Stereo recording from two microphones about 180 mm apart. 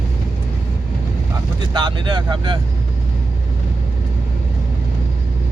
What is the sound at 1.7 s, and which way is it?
Speech, 25° right (ahead or behind).